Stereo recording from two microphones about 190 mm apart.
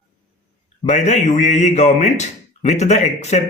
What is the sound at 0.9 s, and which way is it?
A man's voice, 35° left (ahead or behind).